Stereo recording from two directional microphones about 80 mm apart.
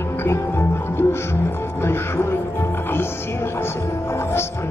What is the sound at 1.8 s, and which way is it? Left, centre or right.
Music, left.